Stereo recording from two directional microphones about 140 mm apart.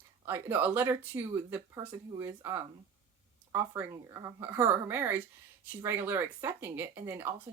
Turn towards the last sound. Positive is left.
turn(degrees=-15)  # may be behind; listen again after turning